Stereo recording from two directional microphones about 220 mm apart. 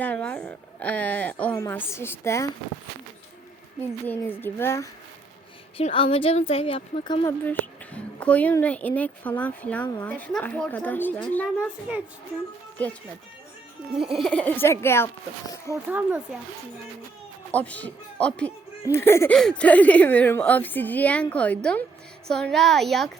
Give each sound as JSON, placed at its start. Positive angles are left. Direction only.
{"t": 0.0, "sound": "a woman's voice", "side_deg": 5}
{"t": 4.0, "sound": "a woman's voice", "side_deg": 10}
{"t": 5.7, "sound": "speech", "side_deg": 25}
{"t": 7.4, "sound": "a woman's voice", "side_deg": 10}
{"t": 14.0, "sound": "a woman's voice", "side_deg": 0}
{"t": 15.9, "sound": "speech", "side_deg": -5}
{"t": 17.5, "sound": "a woman's voice", "side_deg": 5}